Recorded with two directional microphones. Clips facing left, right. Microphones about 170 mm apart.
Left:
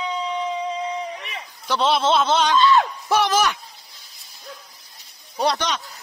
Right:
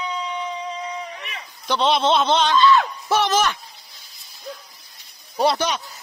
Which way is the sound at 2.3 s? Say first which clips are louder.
Even; 10° left (ahead or behind).